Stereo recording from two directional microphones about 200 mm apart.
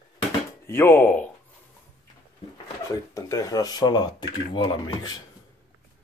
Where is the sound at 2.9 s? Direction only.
15° left (ahead or behind).